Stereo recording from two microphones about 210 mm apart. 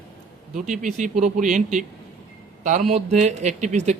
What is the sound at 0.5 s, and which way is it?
Speech, 35° right (ahead or behind).